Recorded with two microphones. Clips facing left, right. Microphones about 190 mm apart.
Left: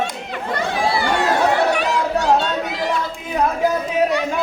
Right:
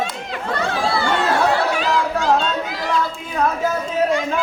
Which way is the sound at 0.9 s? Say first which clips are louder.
Even; 15° left (ahead or behind).